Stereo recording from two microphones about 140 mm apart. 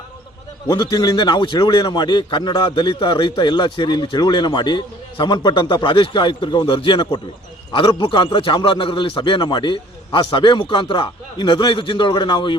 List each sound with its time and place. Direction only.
0.7 s a man's voice: 30° left (ahead or behind)